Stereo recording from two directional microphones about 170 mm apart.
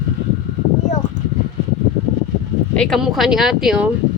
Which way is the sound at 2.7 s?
Centre (ahead or behind).